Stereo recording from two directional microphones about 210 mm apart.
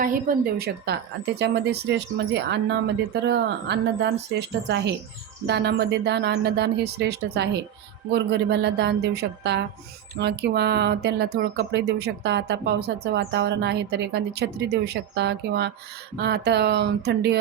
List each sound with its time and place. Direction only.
0.0 s speech: 40° right (ahead or behind)